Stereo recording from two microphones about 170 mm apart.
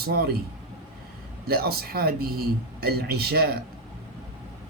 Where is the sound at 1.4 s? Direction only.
65° right (ahead or behind).